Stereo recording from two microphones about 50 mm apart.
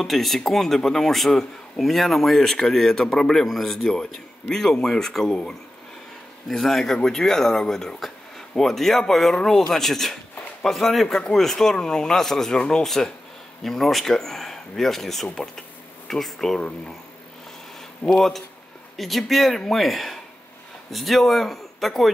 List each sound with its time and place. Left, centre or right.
0.0 s speech: centre
16.5 s speech: centre
18.1 s speech: centre